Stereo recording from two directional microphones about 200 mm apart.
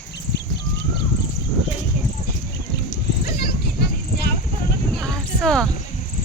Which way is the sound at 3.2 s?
50° left (ahead or behind).